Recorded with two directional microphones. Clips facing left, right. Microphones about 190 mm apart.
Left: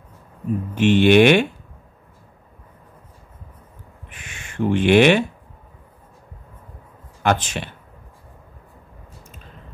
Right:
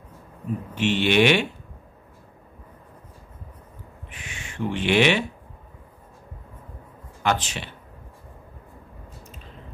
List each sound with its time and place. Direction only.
0.7 s speech: 50° left (ahead or behind)
4.1 s a sound: 50° left (ahead or behind)
7.2 s speech: 50° left (ahead or behind)